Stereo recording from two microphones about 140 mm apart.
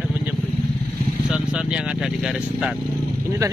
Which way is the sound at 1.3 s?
5° right (ahead or behind).